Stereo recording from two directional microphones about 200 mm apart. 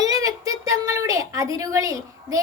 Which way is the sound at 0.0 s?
15° right (ahead or behind).